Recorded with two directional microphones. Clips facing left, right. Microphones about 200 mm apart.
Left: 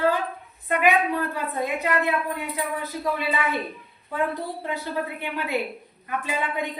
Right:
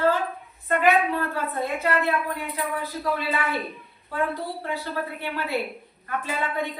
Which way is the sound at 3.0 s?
15° left (ahead or behind).